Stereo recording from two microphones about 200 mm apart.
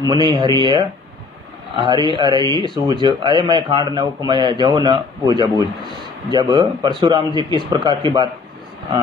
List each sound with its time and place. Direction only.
0.1 s a man's voice: 25° right (ahead or behind)